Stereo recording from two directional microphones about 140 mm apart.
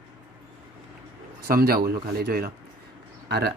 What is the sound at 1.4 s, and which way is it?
Speech, 90° right.